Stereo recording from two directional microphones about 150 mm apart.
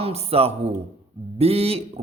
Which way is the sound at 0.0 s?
40° right (ahead or behind).